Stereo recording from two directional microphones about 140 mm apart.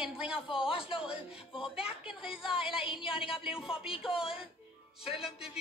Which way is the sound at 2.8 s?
40° left (ahead or behind).